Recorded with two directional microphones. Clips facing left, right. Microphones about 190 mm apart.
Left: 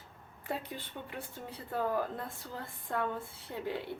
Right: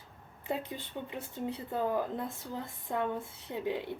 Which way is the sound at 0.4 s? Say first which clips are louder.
Right 3 dB; 20° right (ahead or behind).